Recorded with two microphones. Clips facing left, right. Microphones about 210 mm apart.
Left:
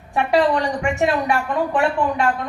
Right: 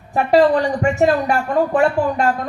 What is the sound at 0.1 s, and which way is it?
A woman's voice, 40° right (ahead or behind).